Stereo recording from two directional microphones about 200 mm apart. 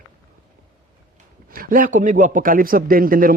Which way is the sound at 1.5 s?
45° right (ahead or behind).